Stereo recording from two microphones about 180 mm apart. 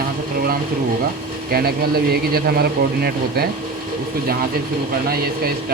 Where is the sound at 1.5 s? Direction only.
60° right (ahead or behind).